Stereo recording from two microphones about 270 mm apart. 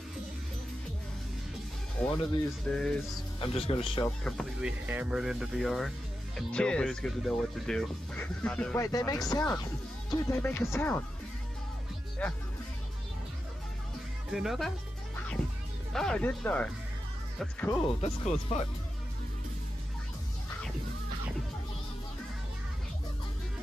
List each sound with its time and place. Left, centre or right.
2.0 s speech: centre
3.3 s speech: left
4.0 s speech: centre
12.2 s speech: centre
14.3 s speech: centre
15.9 s speech: centre
18.0 s speech: left